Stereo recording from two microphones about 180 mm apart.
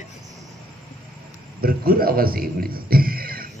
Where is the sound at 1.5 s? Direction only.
55° right (ahead or behind).